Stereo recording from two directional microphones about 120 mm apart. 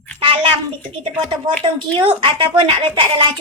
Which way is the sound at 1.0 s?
45° right (ahead or behind).